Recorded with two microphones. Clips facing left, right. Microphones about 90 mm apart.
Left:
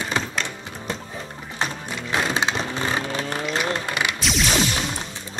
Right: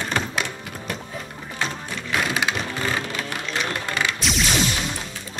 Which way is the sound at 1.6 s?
25° left (ahead or behind).